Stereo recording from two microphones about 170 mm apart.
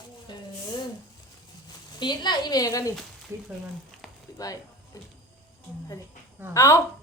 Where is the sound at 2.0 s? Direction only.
25° left (ahead or behind).